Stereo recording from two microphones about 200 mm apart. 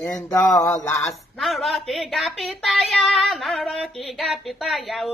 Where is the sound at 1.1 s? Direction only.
Centre (ahead or behind).